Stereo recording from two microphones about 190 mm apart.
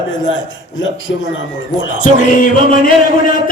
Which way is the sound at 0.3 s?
90° left.